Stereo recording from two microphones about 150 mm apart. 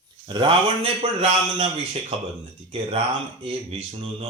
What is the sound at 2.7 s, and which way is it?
Speech, 40° right (ahead or behind).